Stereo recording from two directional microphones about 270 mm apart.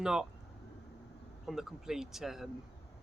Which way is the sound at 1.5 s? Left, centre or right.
Centre.